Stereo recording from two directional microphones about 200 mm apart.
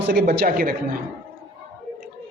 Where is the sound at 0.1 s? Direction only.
50° right (ahead or behind).